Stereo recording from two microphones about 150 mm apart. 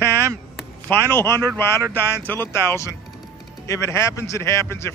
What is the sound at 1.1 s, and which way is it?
A man's voice, 15° left (ahead or behind).